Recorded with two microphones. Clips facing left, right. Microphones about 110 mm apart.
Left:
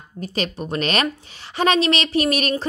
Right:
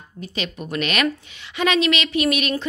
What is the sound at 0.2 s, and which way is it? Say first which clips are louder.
Speech: left 4 dB; 40° left (ahead or behind).